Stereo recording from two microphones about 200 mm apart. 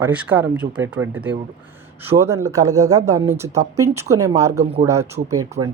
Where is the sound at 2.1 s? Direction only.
15° right (ahead or behind).